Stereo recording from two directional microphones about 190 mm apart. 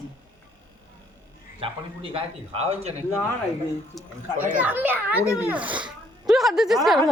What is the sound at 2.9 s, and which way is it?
Speech, 15° left (ahead or behind).